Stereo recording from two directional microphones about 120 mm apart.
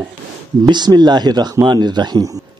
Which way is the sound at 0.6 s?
35° right (ahead or behind).